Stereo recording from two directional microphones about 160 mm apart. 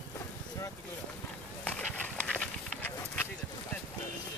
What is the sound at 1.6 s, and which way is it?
Horse, 10° left (ahead or behind).